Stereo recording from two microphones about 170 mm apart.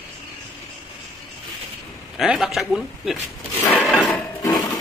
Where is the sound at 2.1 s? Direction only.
Centre (ahead or behind).